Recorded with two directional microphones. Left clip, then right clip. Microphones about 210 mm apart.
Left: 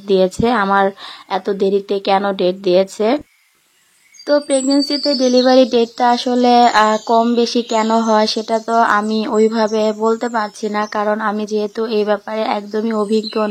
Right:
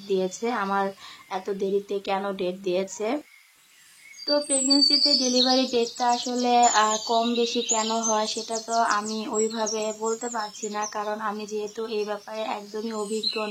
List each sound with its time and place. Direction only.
0.1 s speech: 40° left (ahead or behind)
4.3 s speech: 35° left (ahead or behind)